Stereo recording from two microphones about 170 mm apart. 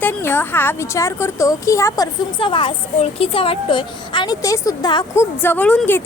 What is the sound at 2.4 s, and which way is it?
Speech, 30° left (ahead or behind).